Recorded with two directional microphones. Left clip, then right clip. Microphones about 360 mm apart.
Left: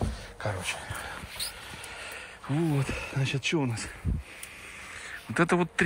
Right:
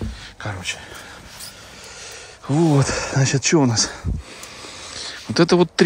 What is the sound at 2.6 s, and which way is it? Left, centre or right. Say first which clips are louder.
Speech: right 13 dB; right.